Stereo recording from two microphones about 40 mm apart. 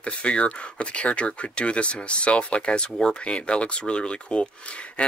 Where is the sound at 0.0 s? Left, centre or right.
Left.